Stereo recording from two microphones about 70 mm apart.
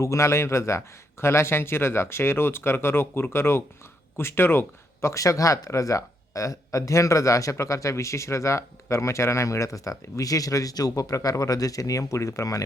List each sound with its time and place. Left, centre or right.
0.0 s speech: left